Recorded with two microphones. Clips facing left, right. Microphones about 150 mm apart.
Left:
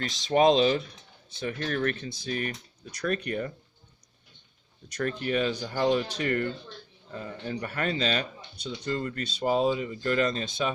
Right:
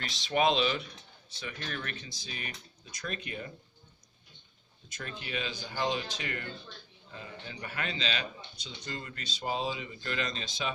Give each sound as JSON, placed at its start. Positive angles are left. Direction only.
{"t": 0.0, "sound": "speech", "side_deg": 40}
{"t": 3.0, "sound": "speech", "side_deg": 55}
{"t": 4.9, "sound": "speech", "side_deg": 50}